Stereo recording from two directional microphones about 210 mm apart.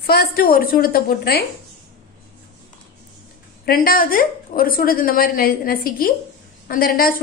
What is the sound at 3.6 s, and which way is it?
A woman's voice, 45° left (ahead or behind).